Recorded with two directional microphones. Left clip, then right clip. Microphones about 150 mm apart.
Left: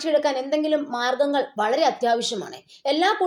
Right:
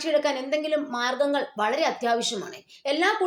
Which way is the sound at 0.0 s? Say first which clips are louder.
Left 3 dB; 35° left (ahead or behind).